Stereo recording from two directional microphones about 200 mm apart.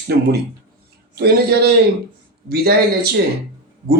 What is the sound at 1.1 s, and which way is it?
Speech, 50° right (ahead or behind).